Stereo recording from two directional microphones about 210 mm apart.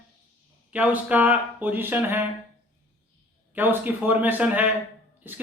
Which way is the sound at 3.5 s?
10° right (ahead or behind).